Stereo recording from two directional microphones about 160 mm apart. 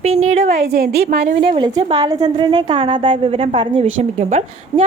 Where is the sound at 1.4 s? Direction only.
35° right (ahead or behind).